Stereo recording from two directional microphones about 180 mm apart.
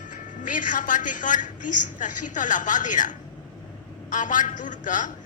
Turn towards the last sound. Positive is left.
turn(degrees=45)  # may be behind; listen again after turning